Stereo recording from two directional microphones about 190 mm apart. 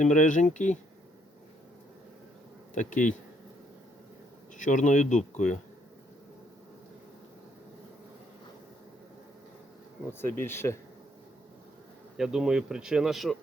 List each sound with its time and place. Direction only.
0.0 s speech: 40° left (ahead or behind)
2.7 s speech: 40° left (ahead or behind)
4.5 s speech: 40° left (ahead or behind)
10.1 s speech: 10° left (ahead or behind)
12.1 s speech: centre (ahead or behind)